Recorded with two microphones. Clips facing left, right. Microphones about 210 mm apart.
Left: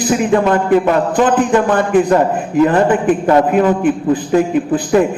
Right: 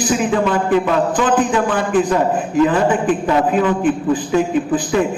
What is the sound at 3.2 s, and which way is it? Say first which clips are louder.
A man's voice: left 5 dB; 45° left (ahead or behind).